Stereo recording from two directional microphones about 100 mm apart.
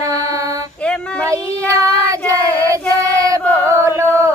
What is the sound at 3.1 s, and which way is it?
Female singing, 35° right (ahead or behind).